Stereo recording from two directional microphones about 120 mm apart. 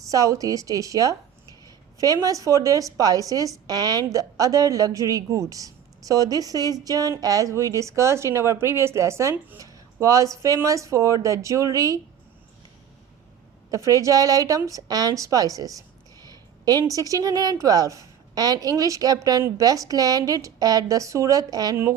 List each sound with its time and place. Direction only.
0.1 s a woman's voice: 30° right (ahead or behind)
13.7 s a woman's voice: 25° right (ahead or behind)